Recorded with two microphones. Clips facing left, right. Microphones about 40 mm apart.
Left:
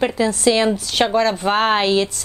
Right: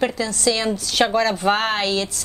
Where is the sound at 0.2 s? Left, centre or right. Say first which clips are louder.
Left 5 dB; left; by 1.7 s centre.